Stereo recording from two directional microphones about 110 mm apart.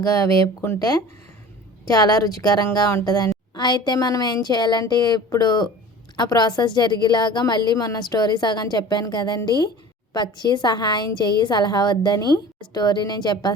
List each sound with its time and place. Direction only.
0.0 s a woman's voice: 30° left (ahead or behind)
1.9 s a woman's voice: 35° left (ahead or behind)